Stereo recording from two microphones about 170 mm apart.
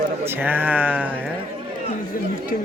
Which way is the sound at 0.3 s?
10° right (ahead or behind).